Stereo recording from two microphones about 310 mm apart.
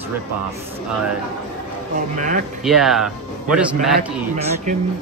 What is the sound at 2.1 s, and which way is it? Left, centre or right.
Speech, right.